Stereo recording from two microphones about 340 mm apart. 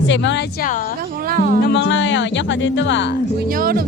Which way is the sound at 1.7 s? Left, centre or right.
Left.